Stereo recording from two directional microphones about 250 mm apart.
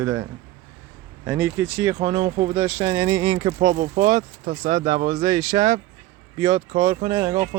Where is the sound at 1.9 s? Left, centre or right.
Right.